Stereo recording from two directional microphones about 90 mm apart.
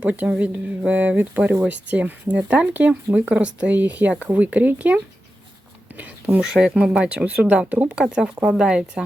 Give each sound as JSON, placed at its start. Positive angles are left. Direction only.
{"t": 0.0, "sound": "speech", "side_deg": -15}
{"t": 5.9, "sound": "a sound", "side_deg": -20}
{"t": 6.4, "sound": "speech", "side_deg": -5}